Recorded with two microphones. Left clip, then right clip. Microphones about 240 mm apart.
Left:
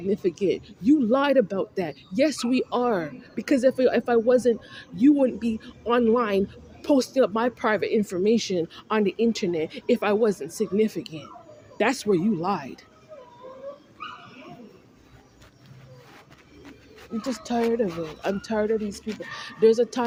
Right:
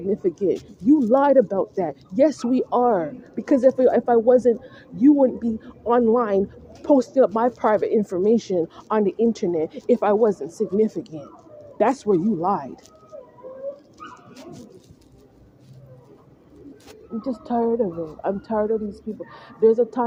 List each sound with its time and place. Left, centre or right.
0.1 s speech: left
17.2 s speech: left